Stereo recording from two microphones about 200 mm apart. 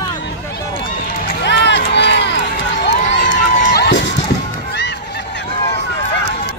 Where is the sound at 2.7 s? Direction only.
60° left (ahead or behind).